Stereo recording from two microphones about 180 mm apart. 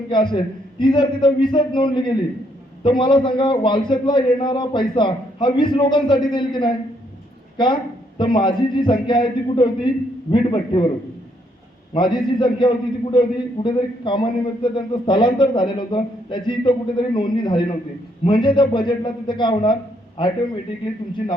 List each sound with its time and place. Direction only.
0.1 s a man's voice: 25° left (ahead or behind)
11.9 s a man's voice: 25° left (ahead or behind)